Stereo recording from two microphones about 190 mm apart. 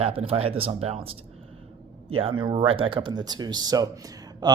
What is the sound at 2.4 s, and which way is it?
Speech, 25° right (ahead or behind).